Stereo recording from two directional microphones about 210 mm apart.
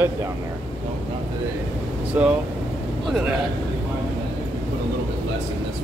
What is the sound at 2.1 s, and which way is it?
Speech, 5° right (ahead or behind).